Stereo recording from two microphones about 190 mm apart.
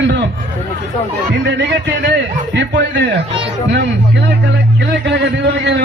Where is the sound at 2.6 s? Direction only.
70° right (ahead or behind).